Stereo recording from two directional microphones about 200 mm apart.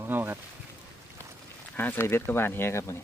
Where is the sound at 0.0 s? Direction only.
10° right (ahead or behind).